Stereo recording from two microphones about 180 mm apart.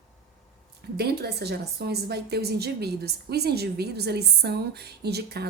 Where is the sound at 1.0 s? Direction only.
60° right (ahead or behind).